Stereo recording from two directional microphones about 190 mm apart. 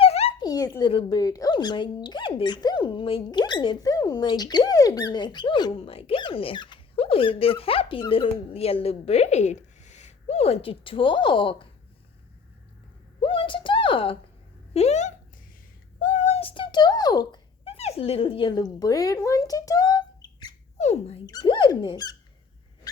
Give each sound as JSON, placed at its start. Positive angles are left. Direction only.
{"t": 0.0, "sound": "speech", "side_deg": 30}
{"t": 13.2, "sound": "a sound", "side_deg": 30}
{"t": 16.0, "sound": "cat", "side_deg": 40}
{"t": 17.7, "sound": "speech", "side_deg": 35}
{"t": 20.7, "sound": "speech", "side_deg": 35}